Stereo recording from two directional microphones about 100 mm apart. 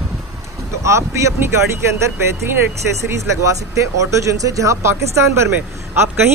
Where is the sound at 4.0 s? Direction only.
30° right (ahead or behind).